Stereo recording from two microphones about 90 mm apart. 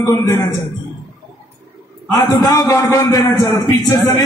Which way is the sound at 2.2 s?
45° left (ahead or behind).